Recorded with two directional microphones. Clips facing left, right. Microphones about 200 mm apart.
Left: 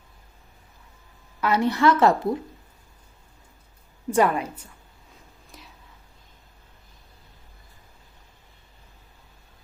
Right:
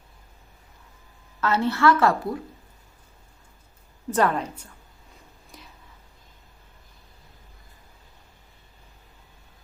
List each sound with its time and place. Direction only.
1.4 s a woman's voice: 15° left (ahead or behind)
4.1 s a woman's voice: 10° left (ahead or behind)
5.5 s whispering: centre (ahead or behind)